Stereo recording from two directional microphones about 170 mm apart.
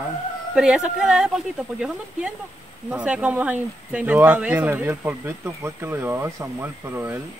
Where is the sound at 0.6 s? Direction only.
5° right (ahead or behind).